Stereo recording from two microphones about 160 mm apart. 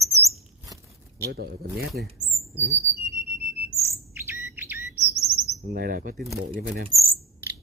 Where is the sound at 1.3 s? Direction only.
75° right (ahead or behind).